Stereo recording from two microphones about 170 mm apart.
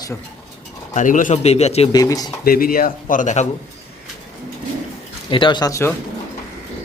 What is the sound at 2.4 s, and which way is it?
Speech, 60° left (ahead or behind).